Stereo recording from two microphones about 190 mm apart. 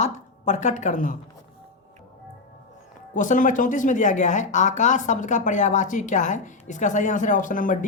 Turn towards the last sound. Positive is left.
turn(degrees=45)  # may be behind; listen again after turning